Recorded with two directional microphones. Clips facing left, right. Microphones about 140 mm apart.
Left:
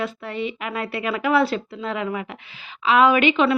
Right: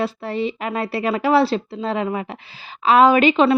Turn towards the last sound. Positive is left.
turn(degrees=-35)  # may be behind; listen again after turning